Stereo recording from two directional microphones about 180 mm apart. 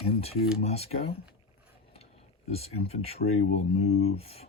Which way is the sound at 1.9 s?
35° left (ahead or behind).